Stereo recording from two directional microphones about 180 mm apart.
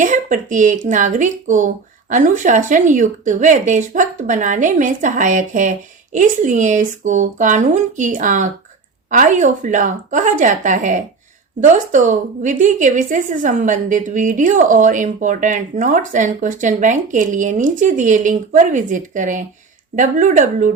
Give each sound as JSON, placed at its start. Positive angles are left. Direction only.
{"t": 0.0, "sound": "a woman's voice", "side_deg": -45}